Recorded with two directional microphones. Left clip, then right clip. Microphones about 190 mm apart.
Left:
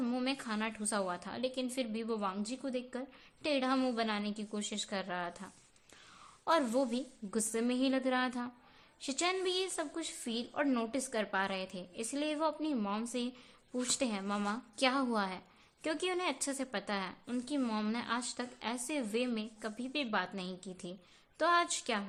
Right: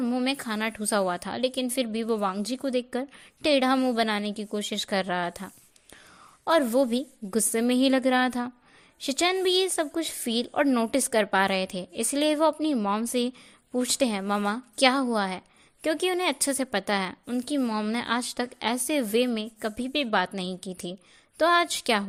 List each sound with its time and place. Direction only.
0.0 s a woman's voice: 25° right (ahead or behind)